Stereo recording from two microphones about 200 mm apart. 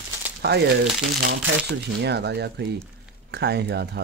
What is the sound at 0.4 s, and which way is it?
Speech, 55° right (ahead or behind).